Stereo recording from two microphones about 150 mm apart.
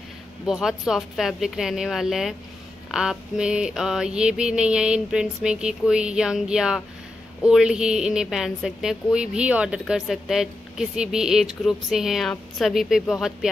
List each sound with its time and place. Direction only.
0.5 s a woman's voice: 5° right (ahead or behind)